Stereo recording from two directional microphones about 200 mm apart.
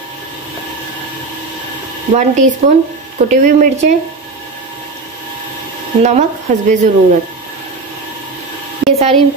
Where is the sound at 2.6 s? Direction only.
30° right (ahead or behind).